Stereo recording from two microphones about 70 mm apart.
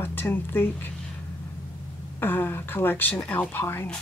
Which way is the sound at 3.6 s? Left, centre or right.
Left.